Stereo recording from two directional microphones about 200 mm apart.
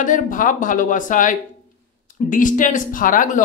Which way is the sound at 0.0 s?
40° left (ahead or behind).